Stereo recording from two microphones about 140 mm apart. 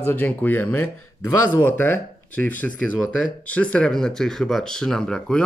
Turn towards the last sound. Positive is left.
turn(degrees=5)  # may be behind; listen again after turning